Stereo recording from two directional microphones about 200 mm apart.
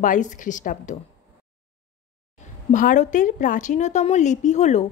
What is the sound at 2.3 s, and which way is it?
A woman's voice, 40° left (ahead or behind).